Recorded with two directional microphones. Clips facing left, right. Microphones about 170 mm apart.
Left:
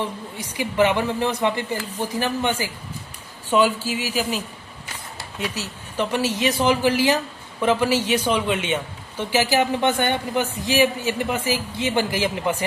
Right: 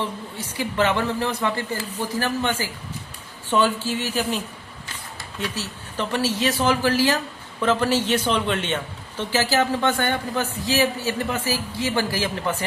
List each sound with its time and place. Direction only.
0.0 s speech: 15° left (ahead or behind)
5.4 s speech: 15° left (ahead or behind)